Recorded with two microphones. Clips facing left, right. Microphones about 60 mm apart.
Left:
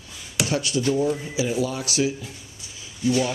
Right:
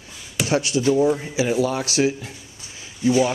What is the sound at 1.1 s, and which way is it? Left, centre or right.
Speech, right.